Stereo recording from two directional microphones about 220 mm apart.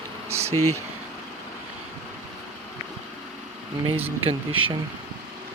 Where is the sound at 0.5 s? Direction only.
90° right.